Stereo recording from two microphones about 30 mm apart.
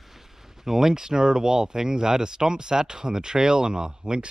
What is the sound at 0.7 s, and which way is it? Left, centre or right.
Speech, centre.